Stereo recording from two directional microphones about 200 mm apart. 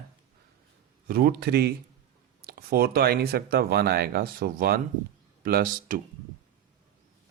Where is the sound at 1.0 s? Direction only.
50° right (ahead or behind).